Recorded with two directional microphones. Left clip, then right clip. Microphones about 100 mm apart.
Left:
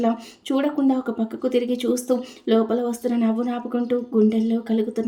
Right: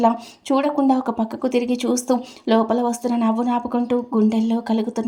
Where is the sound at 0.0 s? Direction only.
40° right (ahead or behind).